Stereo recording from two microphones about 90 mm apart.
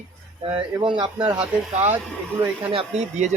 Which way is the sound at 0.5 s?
65° right (ahead or behind).